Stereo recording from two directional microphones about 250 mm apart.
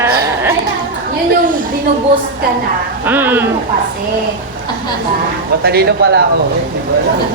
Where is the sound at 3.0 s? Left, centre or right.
Centre.